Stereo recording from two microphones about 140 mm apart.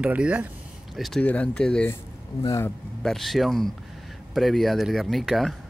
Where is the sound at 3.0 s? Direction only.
Centre (ahead or behind).